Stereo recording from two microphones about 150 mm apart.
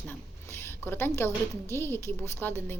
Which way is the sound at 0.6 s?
15° left (ahead or behind).